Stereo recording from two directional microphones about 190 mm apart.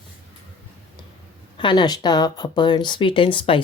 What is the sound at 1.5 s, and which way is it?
Speech, 25° left (ahead or behind).